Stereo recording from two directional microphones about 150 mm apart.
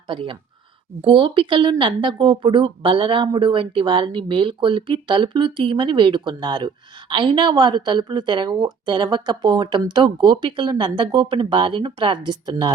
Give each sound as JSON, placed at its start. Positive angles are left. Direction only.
{"t": 0.1, "sound": "a woman's voice", "side_deg": -35}